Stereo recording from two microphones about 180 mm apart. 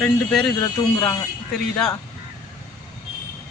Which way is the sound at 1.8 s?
5° left (ahead or behind).